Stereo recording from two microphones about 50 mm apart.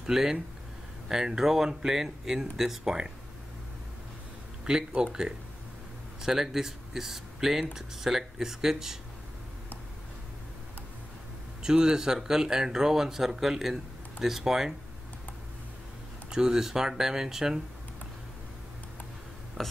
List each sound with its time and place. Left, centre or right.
0.0 s speech: centre
4.6 s speech: centre
11.6 s speech: centre
16.3 s speech: centre
19.6 s speech: centre